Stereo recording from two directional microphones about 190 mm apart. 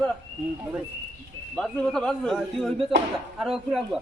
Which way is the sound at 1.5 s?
5° left (ahead or behind).